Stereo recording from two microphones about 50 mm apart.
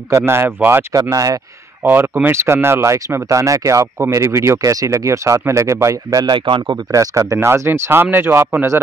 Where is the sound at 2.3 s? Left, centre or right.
Right.